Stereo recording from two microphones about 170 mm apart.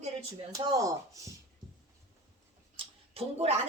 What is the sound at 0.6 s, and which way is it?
Speech, 20° right (ahead or behind).